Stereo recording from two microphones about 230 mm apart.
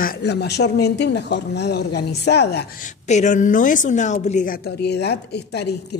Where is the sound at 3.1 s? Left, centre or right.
Left.